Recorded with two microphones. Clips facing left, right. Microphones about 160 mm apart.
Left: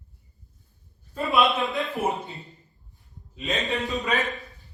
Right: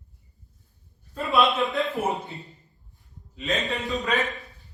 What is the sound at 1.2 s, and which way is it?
Speech, 20° left (ahead or behind).